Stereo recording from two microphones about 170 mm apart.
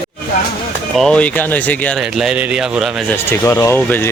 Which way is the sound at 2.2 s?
5° right (ahead or behind).